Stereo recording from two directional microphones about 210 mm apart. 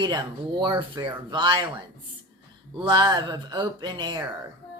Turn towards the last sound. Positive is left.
turn(degrees=-20)  # may be behind; listen again after turning